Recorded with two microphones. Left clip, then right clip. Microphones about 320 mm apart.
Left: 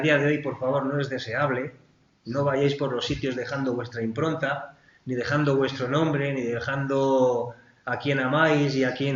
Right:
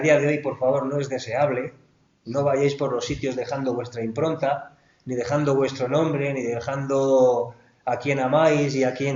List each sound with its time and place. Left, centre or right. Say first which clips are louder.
0.0 s speech: right 3 dB; centre